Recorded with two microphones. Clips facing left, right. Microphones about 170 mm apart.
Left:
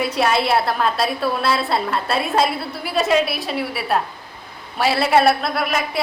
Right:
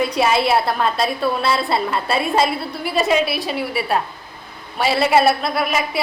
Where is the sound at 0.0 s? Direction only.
Centre (ahead or behind).